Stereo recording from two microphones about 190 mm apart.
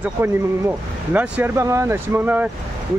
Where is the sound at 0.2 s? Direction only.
10° right (ahead or behind).